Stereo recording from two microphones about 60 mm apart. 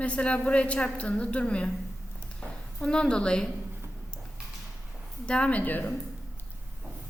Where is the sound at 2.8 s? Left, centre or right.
Centre.